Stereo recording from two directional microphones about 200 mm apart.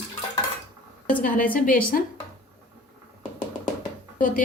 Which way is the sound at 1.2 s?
45° left (ahead or behind).